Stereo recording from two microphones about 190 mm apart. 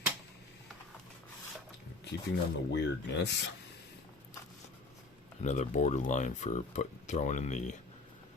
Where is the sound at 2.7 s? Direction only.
65° left (ahead or behind).